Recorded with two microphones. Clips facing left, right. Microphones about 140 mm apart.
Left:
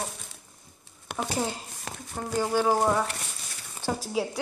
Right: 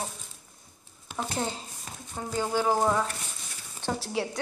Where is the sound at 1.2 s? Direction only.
5° left (ahead or behind).